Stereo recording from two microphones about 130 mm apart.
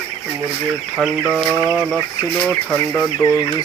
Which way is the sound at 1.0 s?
5° right (ahead or behind).